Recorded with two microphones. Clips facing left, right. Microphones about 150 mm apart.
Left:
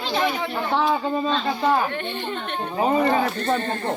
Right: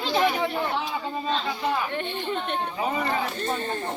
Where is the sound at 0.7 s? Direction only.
85° left.